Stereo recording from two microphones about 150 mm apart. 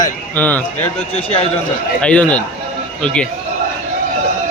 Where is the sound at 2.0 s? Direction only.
10° left (ahead or behind).